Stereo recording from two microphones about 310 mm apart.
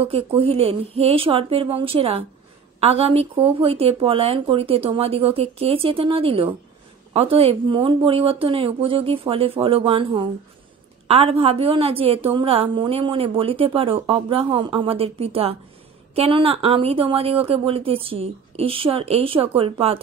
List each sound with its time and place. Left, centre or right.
0.4 s a woman's voice: centre